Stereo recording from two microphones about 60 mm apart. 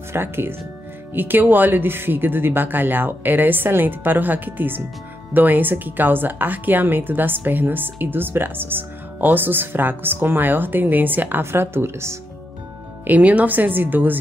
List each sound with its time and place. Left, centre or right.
0.1 s speech: right
13.0 s speech: right